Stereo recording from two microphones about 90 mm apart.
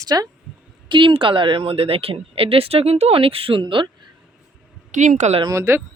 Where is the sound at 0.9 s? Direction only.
70° right (ahead or behind); by 3.6 s 90° right.